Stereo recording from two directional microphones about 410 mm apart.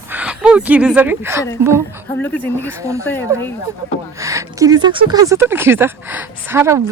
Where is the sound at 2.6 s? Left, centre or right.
Centre.